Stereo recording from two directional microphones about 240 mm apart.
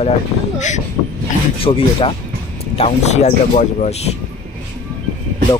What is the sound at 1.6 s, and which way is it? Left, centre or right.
Speech, left.